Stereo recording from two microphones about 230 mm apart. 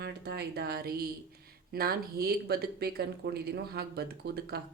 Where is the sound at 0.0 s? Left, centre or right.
Right.